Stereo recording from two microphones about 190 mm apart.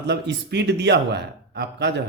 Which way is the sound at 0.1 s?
65° right (ahead or behind).